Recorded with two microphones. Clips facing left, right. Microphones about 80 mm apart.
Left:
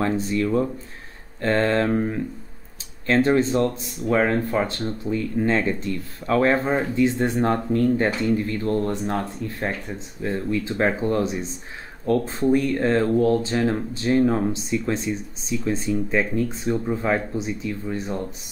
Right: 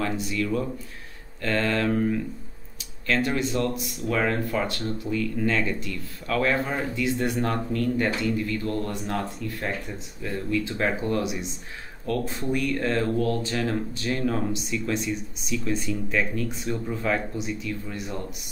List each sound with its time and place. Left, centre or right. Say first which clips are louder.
0.0 s speech: left 5 dB; left